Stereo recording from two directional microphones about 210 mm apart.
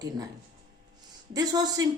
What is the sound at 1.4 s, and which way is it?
Speech, 15° right (ahead or behind).